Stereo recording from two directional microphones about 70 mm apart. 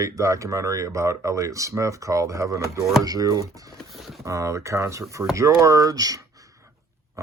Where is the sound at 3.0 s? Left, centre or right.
Right.